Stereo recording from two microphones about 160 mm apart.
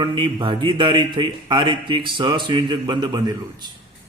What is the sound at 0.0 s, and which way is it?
Speech, 30° right (ahead or behind).